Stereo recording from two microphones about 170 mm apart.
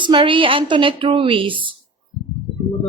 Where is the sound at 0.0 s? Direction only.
30° right (ahead or behind).